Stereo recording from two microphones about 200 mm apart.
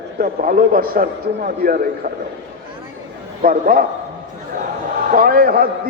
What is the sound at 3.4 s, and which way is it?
Speech, 45° right (ahead or behind).